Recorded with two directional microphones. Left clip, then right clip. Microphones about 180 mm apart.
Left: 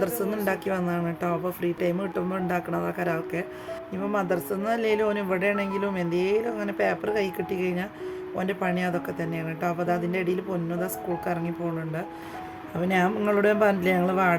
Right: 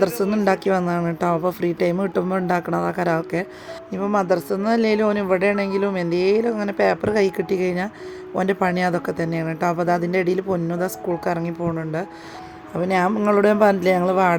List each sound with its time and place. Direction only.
0.0 s speech: 30° right (ahead or behind)
12.9 s speech: 25° right (ahead or behind)